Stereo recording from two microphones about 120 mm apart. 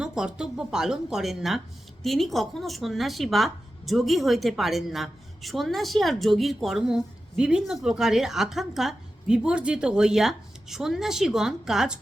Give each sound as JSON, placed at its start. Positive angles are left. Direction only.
{"t": 0.0, "sound": "a woman's voice", "side_deg": -5}